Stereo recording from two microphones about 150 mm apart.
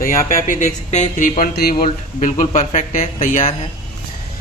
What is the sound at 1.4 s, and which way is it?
Speech, 85° left.